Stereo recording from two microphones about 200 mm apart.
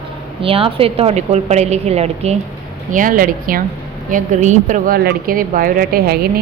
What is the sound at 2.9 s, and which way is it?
A woman's voice, 40° right (ahead or behind).